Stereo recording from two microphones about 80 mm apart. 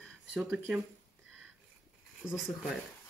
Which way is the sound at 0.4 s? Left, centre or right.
Centre.